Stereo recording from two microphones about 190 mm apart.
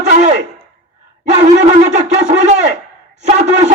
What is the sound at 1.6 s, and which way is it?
Shofar, 35° right (ahead or behind).